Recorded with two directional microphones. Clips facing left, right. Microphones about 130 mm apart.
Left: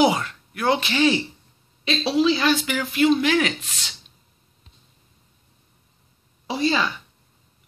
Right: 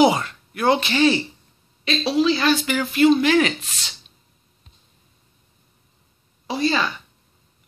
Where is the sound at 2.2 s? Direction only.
10° left (ahead or behind).